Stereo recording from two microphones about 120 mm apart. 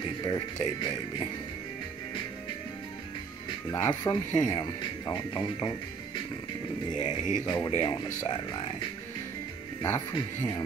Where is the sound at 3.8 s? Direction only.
35° left (ahead or behind).